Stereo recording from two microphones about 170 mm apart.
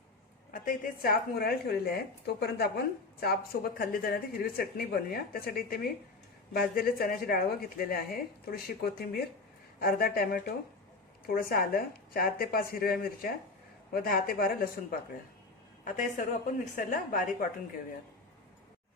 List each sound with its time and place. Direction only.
0.5 s a woman's voice: 50° left (ahead or behind)
15.8 s a woman's voice: 50° left (ahead or behind)